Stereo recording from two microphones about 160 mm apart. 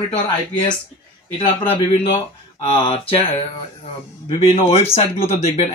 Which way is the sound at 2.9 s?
35° left (ahead or behind).